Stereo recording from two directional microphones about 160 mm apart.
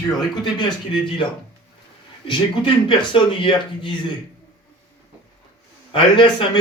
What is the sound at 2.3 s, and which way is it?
Speech, 30° left (ahead or behind).